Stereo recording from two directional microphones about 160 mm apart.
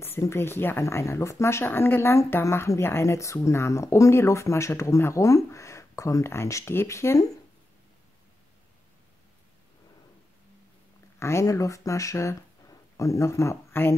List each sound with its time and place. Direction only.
0.0 s speech: 15° left (ahead or behind)
11.1 s speech: 15° left (ahead or behind)